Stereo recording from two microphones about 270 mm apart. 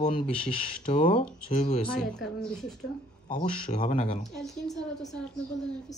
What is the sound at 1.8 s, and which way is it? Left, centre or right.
Speech, centre.